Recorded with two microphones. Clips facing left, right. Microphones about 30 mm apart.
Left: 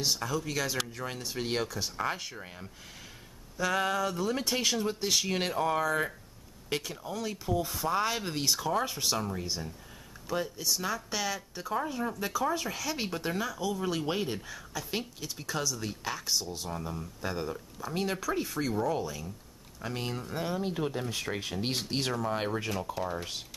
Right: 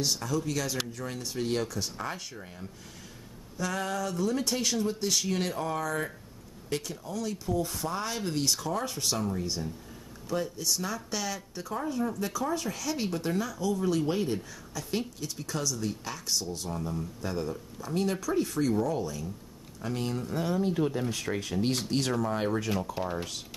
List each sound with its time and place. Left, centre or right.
0.0 s speech: centre
22.9 s speech: centre